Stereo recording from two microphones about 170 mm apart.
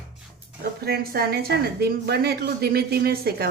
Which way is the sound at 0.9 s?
65° right (ahead or behind).